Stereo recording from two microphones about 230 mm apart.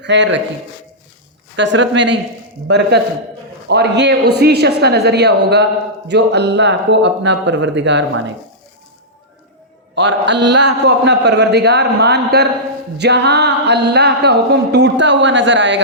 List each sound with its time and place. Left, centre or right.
0.0 s speech: right
1.5 s speech: right
9.9 s speech: right